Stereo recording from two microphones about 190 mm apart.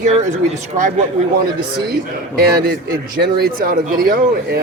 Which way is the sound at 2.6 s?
55° right (ahead or behind).